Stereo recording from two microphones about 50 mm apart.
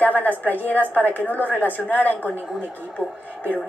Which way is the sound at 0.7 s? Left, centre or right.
Right.